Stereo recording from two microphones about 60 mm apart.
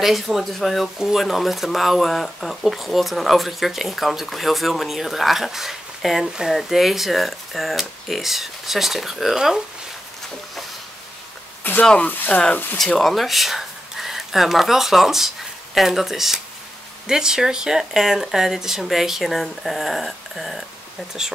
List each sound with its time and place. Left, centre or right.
0.0 s speech: centre
11.8 s speech: centre
12.1 s speech: left
12.7 s speech: centre